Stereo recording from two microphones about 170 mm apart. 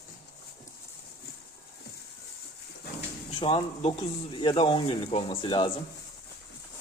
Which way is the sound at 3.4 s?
35° left (ahead or behind).